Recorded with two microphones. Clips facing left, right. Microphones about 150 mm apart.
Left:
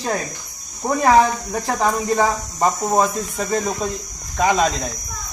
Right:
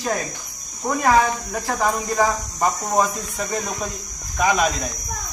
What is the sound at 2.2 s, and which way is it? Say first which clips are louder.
Speech: left 2 dB; 30° left (ahead or behind).